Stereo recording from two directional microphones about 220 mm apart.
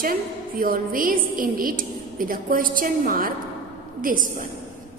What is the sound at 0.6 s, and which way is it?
A woman's voice, 40° right (ahead or behind).